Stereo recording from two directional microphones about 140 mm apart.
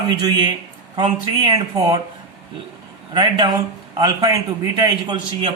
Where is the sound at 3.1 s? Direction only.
30° right (ahead or behind).